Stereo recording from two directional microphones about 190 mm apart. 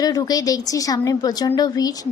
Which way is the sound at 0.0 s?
20° left (ahead or behind).